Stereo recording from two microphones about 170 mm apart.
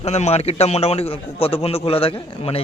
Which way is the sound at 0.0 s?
40° left (ahead or behind).